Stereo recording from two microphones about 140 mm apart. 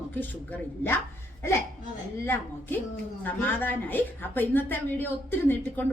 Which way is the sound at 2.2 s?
15° left (ahead or behind).